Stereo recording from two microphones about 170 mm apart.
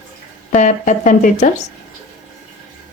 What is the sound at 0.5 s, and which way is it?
Speech, 45° left (ahead or behind).